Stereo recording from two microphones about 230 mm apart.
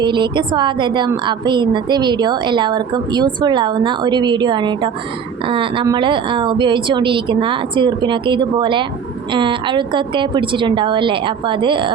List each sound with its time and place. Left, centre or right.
0.0 s a woman's voice: centre